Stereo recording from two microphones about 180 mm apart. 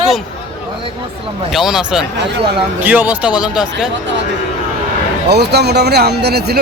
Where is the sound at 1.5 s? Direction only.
Centre (ahead or behind).